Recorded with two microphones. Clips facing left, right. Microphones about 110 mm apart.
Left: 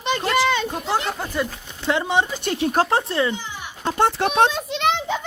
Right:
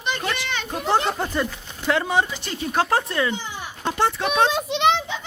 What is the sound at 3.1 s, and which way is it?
Speech, 30° left (ahead or behind).